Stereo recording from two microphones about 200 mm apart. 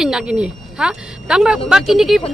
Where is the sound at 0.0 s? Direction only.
5° right (ahead or behind).